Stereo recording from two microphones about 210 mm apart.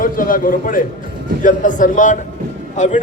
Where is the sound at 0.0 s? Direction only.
40° left (ahead or behind).